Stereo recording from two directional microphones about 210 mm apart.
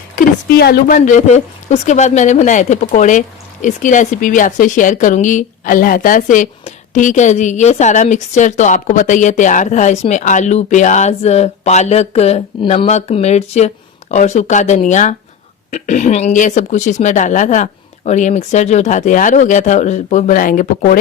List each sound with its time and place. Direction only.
0.2 s speech: 45° left (ahead or behind)